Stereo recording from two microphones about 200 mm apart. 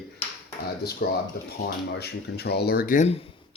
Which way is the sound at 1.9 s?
55° left (ahead or behind).